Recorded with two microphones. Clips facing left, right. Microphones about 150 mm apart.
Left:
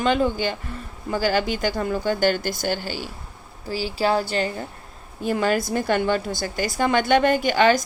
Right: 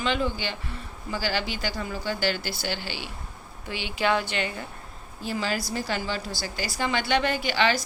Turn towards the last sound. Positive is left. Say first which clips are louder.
# left 7 dB
turn(degrees=45)  # may be behind; listen again after turning